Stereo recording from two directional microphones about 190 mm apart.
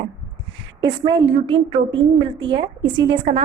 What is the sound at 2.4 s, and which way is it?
Speech, 25° right (ahead or behind).